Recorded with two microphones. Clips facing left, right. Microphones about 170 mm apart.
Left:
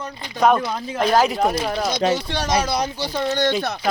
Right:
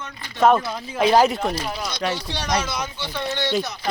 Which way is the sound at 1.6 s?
45° left (ahead or behind).